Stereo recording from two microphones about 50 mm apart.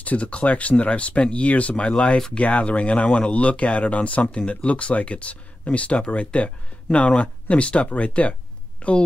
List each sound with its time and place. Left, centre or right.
0.0 s speech: left